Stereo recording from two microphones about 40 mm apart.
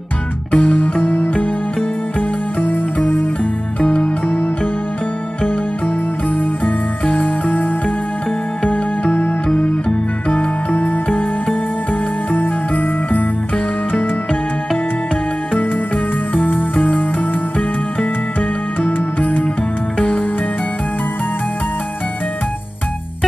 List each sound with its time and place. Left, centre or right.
0.5 s music: left
2.6 s music: left
3.8 s music: left
6.3 s jingle bell: left
10.2 s music: left
11.9 s jingle bell: left
16.3 s music: left
18.8 s music: left